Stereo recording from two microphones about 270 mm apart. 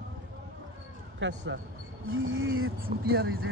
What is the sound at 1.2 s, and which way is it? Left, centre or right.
Speech, right.